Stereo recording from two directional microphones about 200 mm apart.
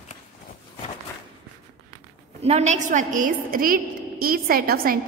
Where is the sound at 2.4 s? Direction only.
35° right (ahead or behind).